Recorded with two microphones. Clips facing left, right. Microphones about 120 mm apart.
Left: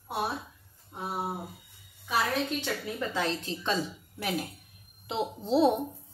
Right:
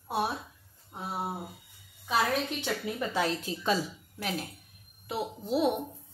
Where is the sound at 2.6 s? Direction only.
15° right (ahead or behind).